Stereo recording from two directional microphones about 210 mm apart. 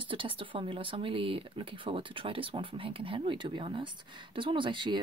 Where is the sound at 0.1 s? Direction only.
25° right (ahead or behind).